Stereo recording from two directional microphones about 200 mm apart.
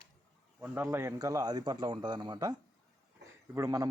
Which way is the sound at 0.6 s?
10° right (ahead or behind).